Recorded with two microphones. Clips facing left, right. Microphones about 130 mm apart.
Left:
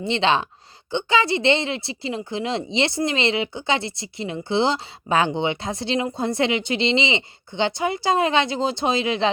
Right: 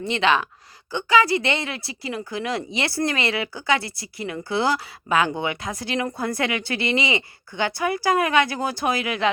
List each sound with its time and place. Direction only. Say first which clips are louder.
0.0 s a woman's voice: left 1 dB; 30° left (ahead or behind)